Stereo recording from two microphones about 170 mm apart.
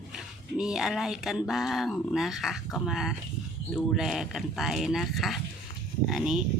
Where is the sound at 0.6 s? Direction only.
5° right (ahead or behind).